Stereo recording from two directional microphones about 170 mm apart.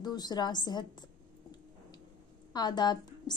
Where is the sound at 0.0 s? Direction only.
25° left (ahead or behind).